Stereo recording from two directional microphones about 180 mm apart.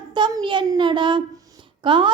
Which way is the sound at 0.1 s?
25° right (ahead or behind).